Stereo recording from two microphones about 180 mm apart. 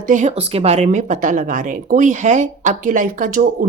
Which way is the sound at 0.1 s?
40° right (ahead or behind).